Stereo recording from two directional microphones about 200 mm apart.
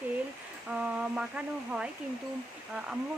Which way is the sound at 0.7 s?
5° right (ahead or behind).